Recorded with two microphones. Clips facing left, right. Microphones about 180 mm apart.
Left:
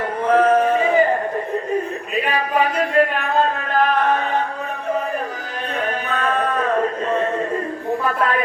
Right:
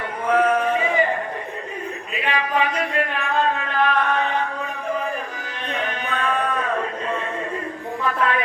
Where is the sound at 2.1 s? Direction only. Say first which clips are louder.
Left 3 dB; 40° left (ahead or behind).